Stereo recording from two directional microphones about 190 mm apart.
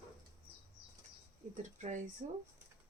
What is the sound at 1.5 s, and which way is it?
Speech, 40° right (ahead or behind).